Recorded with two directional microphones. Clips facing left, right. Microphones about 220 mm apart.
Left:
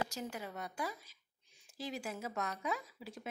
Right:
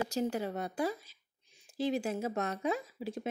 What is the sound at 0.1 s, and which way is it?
A woman's voice, 30° right (ahead or behind).